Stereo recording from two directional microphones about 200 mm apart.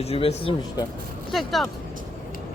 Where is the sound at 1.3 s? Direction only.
Centre (ahead or behind).